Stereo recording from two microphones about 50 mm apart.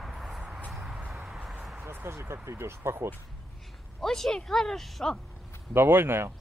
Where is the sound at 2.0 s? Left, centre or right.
Right.